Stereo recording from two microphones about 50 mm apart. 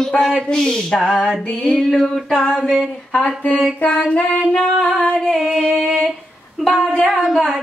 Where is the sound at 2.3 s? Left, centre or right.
Centre.